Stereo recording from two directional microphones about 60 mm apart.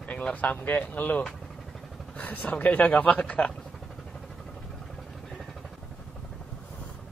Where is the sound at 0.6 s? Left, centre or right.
Left.